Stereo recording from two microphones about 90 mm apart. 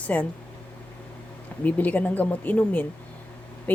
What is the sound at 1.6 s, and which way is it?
Speech, 15° left (ahead or behind).